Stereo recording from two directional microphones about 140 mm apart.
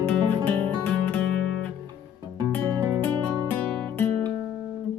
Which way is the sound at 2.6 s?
25° right (ahead or behind).